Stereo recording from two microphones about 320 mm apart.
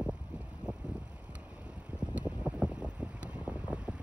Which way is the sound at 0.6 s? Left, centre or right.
Centre.